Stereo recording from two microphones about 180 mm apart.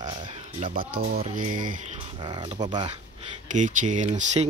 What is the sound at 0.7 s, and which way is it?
Speech, 50° right (ahead or behind).